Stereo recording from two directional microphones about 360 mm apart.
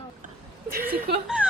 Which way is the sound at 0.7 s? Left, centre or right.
Right.